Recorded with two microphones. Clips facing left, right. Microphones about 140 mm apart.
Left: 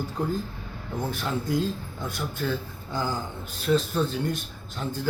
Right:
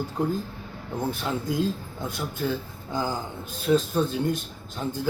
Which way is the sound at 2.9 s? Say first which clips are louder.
Right 1 dB; 15° right (ahead or behind).